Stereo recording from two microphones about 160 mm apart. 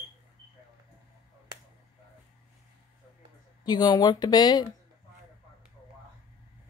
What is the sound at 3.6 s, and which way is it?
A woman's voice, 25° left (ahead or behind).